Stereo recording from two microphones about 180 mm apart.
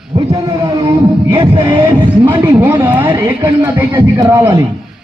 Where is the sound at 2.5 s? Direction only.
10° right (ahead or behind).